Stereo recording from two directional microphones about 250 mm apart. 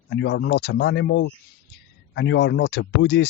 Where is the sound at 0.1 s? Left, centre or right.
Left.